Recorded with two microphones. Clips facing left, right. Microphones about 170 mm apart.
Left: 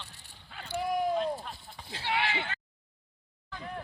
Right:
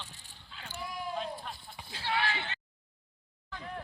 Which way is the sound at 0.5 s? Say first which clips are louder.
Left 4 dB; 55° left (ahead or behind).